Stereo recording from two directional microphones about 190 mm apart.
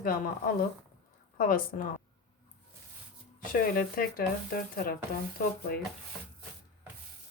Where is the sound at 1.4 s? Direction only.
50° left (ahead or behind).